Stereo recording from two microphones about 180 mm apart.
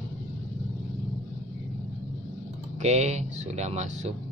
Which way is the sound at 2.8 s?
40° right (ahead or behind).